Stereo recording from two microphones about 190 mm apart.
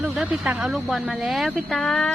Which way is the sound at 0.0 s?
5° right (ahead or behind).